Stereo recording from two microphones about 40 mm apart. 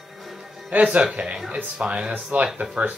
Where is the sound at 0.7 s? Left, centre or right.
Right.